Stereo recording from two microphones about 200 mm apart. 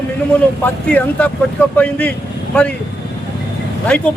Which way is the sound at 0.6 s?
5° left (ahead or behind).